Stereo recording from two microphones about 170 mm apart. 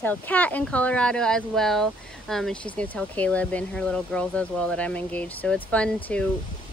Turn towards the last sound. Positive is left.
turn(degrees=5)  # may be behind; listen again after turning